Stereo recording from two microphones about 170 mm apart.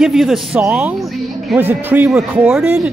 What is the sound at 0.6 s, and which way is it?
Music, 10° right (ahead or behind).